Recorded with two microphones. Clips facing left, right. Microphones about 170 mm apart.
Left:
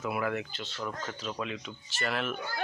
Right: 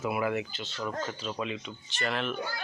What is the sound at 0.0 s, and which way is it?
Speech, 5° right (ahead or behind).